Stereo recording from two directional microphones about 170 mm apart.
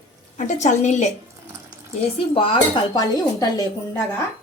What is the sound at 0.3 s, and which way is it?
Speech, 45° left (ahead or behind).